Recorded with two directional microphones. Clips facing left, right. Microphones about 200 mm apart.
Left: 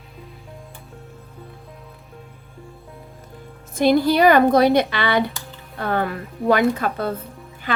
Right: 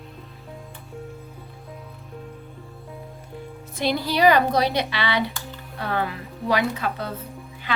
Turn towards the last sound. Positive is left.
turn(degrees=50)  # may be behind; listen again after turning